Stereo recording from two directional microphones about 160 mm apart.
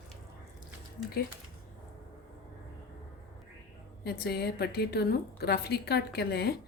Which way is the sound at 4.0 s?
85° left.